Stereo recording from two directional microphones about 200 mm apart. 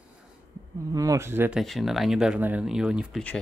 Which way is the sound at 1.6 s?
Centre (ahead or behind).